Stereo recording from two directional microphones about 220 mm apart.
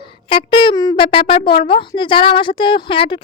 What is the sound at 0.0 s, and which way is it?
A child's voice, 25° left (ahead or behind).